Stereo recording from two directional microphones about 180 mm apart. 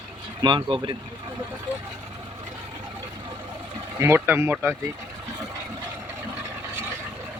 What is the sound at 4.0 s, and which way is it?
Speech, 15° right (ahead or behind).